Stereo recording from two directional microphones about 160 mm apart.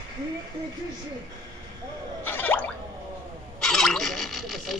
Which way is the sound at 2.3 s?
10° left (ahead or behind).